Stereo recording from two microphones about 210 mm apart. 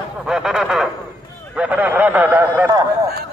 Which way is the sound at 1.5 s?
5° right (ahead or behind).